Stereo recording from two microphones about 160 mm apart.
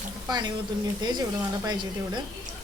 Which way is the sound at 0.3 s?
25° right (ahead or behind).